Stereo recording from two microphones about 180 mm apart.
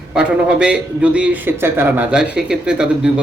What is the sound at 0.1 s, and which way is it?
A man's voice, 5° right (ahead or behind).